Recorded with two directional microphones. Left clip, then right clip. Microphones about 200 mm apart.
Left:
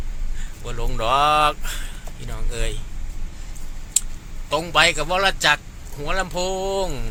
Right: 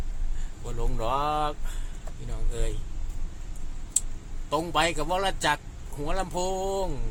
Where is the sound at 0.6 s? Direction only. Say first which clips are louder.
Left 8 dB; 5° right (ahead or behind).